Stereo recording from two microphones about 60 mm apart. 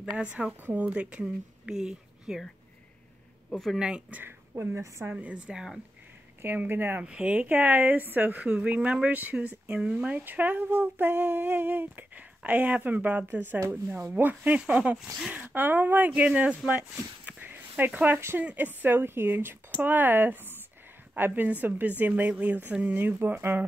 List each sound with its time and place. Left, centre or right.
0.2 s speech: centre
0.5 s speech: right
0.9 s a woman's voice: centre
3.5 s speech: centre
4.1 s speech: right
4.6 s a woman's voice: right
5.1 s speech: centre
6.4 s speech: right
7.0 s speech: centre
17.2 s a sound: right
17.5 s a sound: right
18.4 s speech: right
22.9 s speech: right